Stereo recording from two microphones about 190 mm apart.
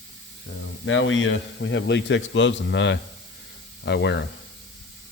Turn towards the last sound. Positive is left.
turn(degrees=65)  # may be behind; listen again after turning